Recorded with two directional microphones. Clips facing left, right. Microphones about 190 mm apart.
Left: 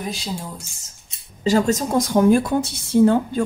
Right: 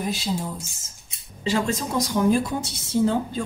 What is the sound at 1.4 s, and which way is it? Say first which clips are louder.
A woman's voice: left 6 dB; 40° left (ahead or behind).